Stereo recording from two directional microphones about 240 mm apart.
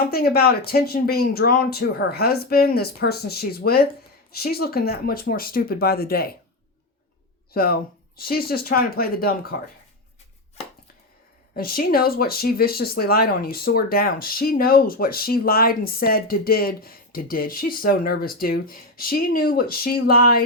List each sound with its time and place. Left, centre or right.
0.1 s speech: left
7.5 s speech: left
11.5 s speech: left